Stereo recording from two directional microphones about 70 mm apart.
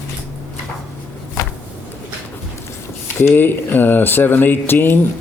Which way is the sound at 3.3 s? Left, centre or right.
Left.